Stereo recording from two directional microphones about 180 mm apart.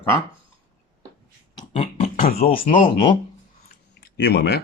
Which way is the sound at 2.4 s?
45° left (ahead or behind).